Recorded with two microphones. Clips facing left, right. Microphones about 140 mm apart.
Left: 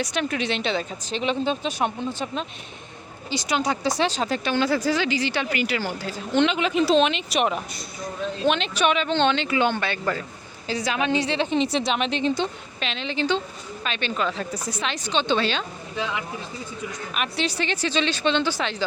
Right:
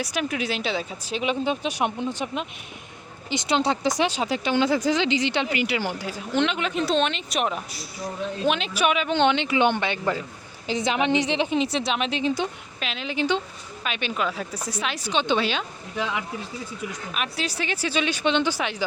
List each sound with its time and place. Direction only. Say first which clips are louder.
0.0 s a woman's voice: left 1 dB; 5° right (ahead or behind)
6.4 s a woman's voice: left 4 dB; centre (ahead or behind); by 11.5 s 15° right (ahead or behind)
11.5 s a woman's voice: left 1 dB; centre (ahead or behind)
17.2 s speech: left 3 dB; centre (ahead or behind)